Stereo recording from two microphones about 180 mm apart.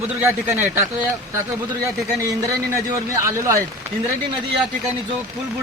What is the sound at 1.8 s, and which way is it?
A man's voice, 15° right (ahead or behind).